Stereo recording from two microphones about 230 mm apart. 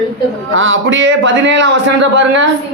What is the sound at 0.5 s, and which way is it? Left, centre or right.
A man's voice, right.